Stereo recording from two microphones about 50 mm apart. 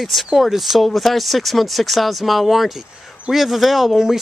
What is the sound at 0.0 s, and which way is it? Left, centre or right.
Speech, centre.